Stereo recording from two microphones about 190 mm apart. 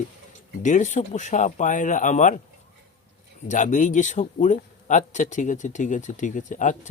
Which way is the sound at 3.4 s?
40° left (ahead or behind).